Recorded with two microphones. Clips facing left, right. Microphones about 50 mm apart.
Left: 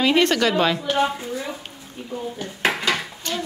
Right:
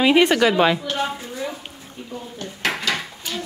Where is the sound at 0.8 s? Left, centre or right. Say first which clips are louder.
Left 4 dB; centre.